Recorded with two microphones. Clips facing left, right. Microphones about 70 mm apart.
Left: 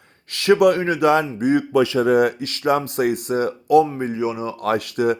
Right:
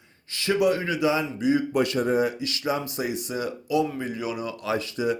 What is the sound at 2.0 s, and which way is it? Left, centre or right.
Speech, left.